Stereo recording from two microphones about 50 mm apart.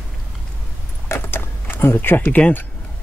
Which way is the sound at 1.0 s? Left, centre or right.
Left.